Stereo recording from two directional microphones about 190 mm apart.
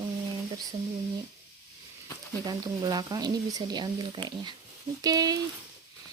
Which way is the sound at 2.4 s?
20° right (ahead or behind).